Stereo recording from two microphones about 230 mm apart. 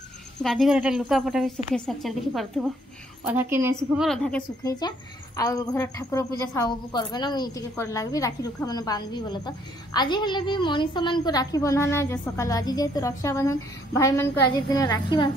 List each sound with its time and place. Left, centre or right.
0.4 s a woman's voice: centre
3.3 s a woman's voice: centre
3.7 s a woman's voice: centre
4.6 s a woman's voice: centre